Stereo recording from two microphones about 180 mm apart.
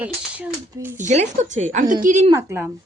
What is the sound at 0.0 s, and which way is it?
Speech, 10° right (ahead or behind).